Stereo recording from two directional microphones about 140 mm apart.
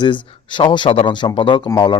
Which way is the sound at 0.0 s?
35° left (ahead or behind).